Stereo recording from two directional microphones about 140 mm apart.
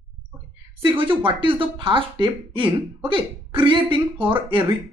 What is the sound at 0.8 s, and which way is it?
A woman's voice, 40° right (ahead or behind).